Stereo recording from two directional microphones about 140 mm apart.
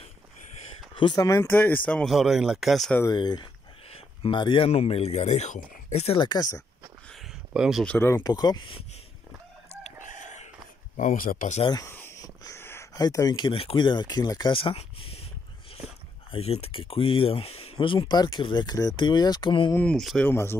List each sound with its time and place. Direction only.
1.1 s speech: 25° left (ahead or behind); by 3.0 s centre (ahead or behind)
3.0 s speech: 30° left (ahead or behind); by 6.1 s 55° left (ahead or behind)
6.1 s speech: 30° left (ahead or behind)
7.1 s a sound: centre (ahead or behind)
7.8 s speech: 10° left (ahead or behind)
8.1 s speech: 25° left (ahead or behind)
9.7 s crowing: 60° left (ahead or behind)
11.0 s speech: 80° left
11.6 s speech: 30° left (ahead or behind)
11.9 s a sound: 15° left (ahead or behind)
13.0 s speech: 30° left (ahead or behind)
16.3 s speech: 45° left (ahead or behind)
19.7 s speech: 10° left (ahead or behind)